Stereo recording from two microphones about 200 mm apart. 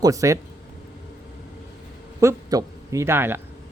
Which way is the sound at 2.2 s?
15° right (ahead or behind).